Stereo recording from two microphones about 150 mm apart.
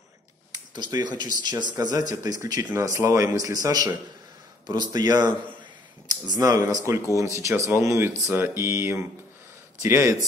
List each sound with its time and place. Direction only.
0.5 s speech: 30° right (ahead or behind)
4.9 s speech: 25° right (ahead or behind)